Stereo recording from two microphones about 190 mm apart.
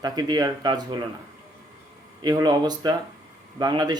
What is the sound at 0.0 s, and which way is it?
Speech, 20° right (ahead or behind).